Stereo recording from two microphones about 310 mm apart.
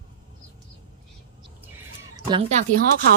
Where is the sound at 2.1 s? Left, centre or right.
Centre.